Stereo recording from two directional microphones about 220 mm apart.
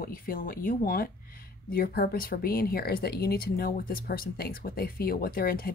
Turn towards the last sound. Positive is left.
turn(degrees=45)  # may be behind; listen again after turning